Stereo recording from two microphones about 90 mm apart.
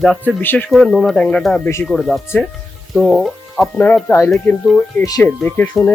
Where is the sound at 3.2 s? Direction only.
Centre (ahead or behind).